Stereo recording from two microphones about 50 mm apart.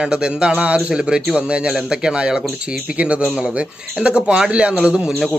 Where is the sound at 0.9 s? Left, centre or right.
Centre.